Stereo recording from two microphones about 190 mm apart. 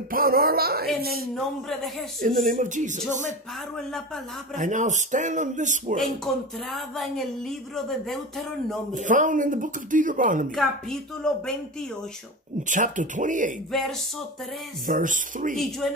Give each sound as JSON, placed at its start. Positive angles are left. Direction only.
{"t": 0.1, "sound": "speech", "side_deg": -50}
{"t": 1.3, "sound": "speech", "side_deg": 0}
{"t": 2.2, "sound": "speech", "side_deg": -45}
{"t": 4.6, "sound": "speech", "side_deg": -40}
{"t": 5.9, "sound": "speech", "side_deg": 0}
{"t": 8.9, "sound": "speech", "side_deg": -40}
{"t": 10.5, "sound": "speech", "side_deg": 0}
{"t": 12.6, "sound": "speech", "side_deg": -40}
{"t": 13.7, "sound": "speech", "side_deg": 0}
{"t": 14.9, "sound": "speech", "side_deg": -45}
{"t": 15.5, "sound": "speech", "side_deg": 0}